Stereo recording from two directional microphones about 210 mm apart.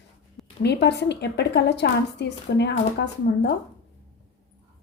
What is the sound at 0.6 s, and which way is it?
A woman's voice, 55° left (ahead or behind).